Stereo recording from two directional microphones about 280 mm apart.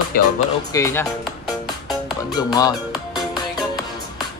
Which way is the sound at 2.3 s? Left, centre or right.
Centre.